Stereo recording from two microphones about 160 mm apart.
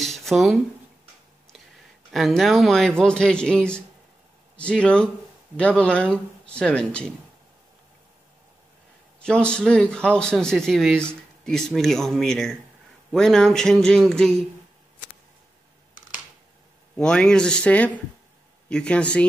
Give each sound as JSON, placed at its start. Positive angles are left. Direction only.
{"t": 0.0, "sound": "a sound", "side_deg": 0}
{"t": 2.1, "sound": "a man's voice", "side_deg": 0}
{"t": 9.2, "sound": "a man's voice", "side_deg": 5}
{"t": 16.9, "sound": "speech", "side_deg": 5}